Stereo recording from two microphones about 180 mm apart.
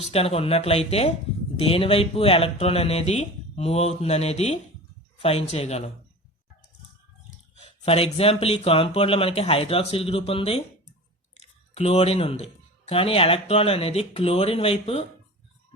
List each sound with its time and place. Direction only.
0.0 s speech: 35° left (ahead or behind)
7.6 s speech: 35° left (ahead or behind)